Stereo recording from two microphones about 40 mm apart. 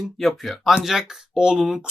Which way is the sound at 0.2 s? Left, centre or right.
Centre.